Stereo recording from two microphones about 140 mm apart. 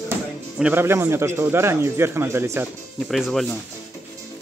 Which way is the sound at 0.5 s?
10° right (ahead or behind).